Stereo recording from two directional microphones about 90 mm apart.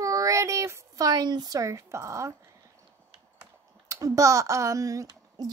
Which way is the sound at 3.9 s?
35° right (ahead or behind).